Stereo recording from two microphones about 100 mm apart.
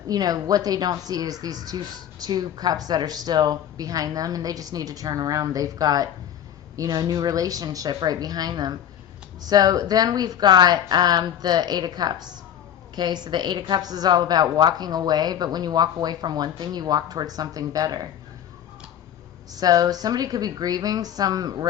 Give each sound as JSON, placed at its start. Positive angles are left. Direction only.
{"t": 0.1, "sound": "a woman's voice", "side_deg": -40}
{"t": 19.5, "sound": "speech", "side_deg": -40}